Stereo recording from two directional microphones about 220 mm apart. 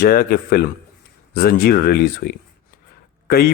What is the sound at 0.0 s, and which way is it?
A man's voice, 45° left (ahead or behind).